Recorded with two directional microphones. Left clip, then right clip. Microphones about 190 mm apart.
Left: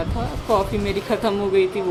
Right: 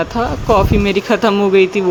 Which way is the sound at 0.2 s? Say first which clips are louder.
Right 8 dB; 35° right (ahead or behind).